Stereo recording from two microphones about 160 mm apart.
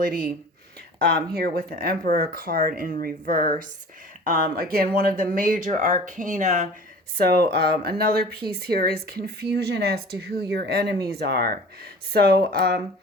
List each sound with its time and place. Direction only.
1.3 s speech: 65° right (ahead or behind); by 6.7 s 50° right (ahead or behind)
7.2 s speech: 80° right
12.1 s speech: 75° right (ahead or behind)